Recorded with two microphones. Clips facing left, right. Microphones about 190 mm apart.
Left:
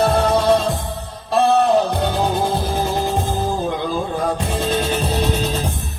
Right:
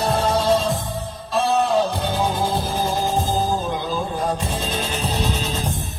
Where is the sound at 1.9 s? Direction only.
60° left (ahead or behind).